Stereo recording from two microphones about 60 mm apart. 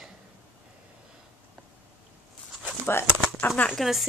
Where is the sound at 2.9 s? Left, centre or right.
Left.